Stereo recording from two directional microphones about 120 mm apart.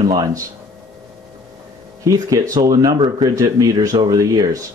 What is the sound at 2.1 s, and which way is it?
Speech, 30° right (ahead or behind).